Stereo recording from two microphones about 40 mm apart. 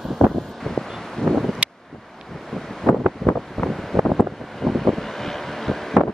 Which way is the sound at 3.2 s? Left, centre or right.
Centre.